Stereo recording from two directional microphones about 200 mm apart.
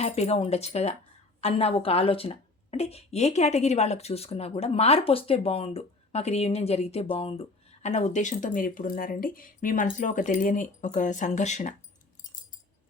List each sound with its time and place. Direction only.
0.0 s a woman's voice: 30° left (ahead or behind)